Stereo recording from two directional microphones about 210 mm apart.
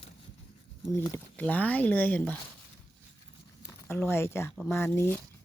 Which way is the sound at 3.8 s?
10° left (ahead or behind).